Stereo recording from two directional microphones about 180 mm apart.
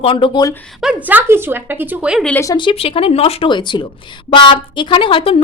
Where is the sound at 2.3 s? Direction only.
15° left (ahead or behind).